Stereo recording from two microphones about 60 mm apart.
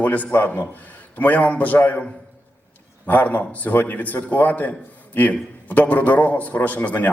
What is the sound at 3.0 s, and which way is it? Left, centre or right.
A man's voice, left.